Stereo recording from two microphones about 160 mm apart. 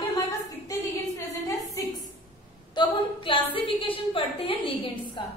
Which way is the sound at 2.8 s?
30° left (ahead or behind).